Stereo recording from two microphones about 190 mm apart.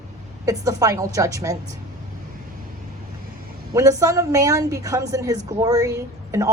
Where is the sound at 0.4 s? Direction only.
15° right (ahead or behind).